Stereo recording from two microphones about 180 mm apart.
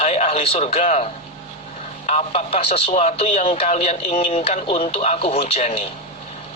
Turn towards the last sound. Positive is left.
turn(degrees=35)  # may be behind; listen again after turning